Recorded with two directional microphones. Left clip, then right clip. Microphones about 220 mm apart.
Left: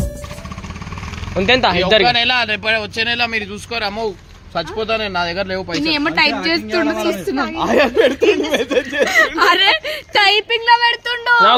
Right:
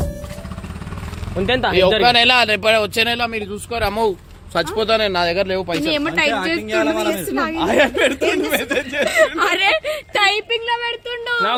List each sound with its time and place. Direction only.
1.4 s speech: 20° left (ahead or behind)
2.0 s speech: 50° right (ahead or behind); by 5.8 s 25° right (ahead or behind)
5.8 s speech: 35° left (ahead or behind)
6.8 s speech: 45° right (ahead or behind)
7.6 s speech: 30° left (ahead or behind)